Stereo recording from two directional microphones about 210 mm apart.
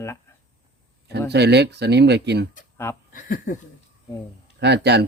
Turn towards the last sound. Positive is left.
turn(degrees=-55)  # may be behind; listen again after turning